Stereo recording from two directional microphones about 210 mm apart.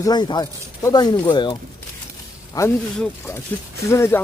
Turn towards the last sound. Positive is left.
turn(degrees=15)  # may be behind; listen again after turning